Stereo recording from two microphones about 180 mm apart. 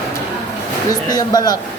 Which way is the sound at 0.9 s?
20° left (ahead or behind).